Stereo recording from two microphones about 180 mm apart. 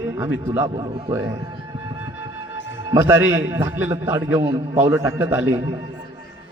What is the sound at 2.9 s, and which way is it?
A man's voice, 15° right (ahead or behind).